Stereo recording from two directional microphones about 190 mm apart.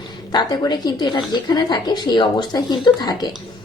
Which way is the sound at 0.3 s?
20° left (ahead or behind).